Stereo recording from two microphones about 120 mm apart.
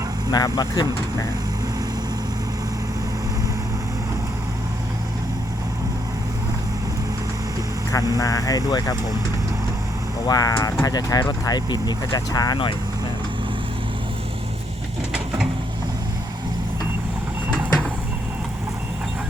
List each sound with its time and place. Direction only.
0.3 s speech: 30° left (ahead or behind)
7.9 s speech: 30° left (ahead or behind)
10.2 s speech: 30° left (ahead or behind)